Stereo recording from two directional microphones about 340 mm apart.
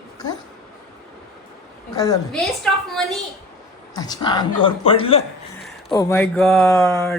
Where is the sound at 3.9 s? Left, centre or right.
Centre.